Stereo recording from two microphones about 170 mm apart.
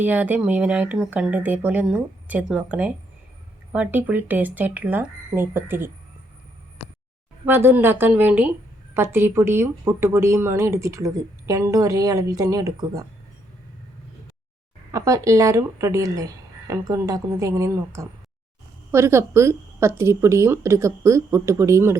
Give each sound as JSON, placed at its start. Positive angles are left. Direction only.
{"t": 0.0, "sound": "speech", "side_deg": -10}
{"t": 7.4, "sound": "speech", "side_deg": -15}
{"t": 14.9, "sound": "a woman's voice", "side_deg": -20}